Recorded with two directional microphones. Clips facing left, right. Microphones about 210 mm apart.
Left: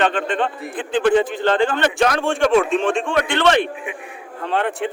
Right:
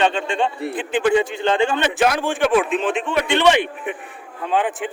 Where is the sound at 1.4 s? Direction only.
20° right (ahead or behind).